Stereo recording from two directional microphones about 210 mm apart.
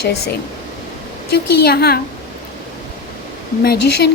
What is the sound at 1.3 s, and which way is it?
Speech, 50° left (ahead or behind).